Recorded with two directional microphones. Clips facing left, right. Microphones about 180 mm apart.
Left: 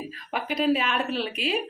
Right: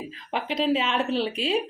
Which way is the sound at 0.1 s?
20° right (ahead or behind).